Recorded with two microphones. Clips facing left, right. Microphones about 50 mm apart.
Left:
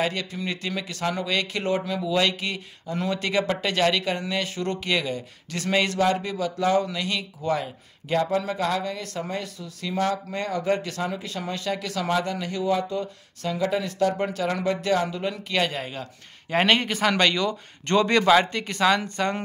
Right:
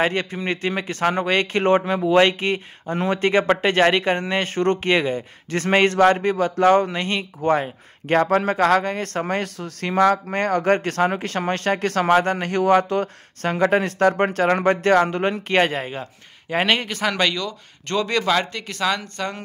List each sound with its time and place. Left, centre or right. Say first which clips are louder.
0.0 s speech: right 5 dB; right
15.3 s speech: right 6 dB; right
16.4 s speech: right 1 dB; centre
16.8 s speech: even; centre